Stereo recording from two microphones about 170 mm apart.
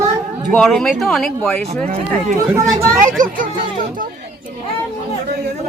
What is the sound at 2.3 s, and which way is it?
Speech, 45° right (ahead or behind).